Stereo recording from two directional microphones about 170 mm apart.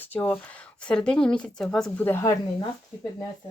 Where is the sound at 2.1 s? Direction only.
15° left (ahead or behind).